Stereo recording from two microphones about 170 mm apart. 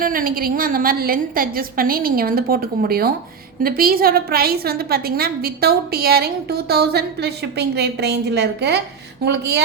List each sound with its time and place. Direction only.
0.0 s a woman's voice: 55° right (ahead or behind); by 9.6 s 80° right